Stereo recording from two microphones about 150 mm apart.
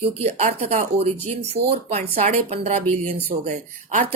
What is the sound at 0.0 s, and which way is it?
Speech, 40° right (ahead or behind).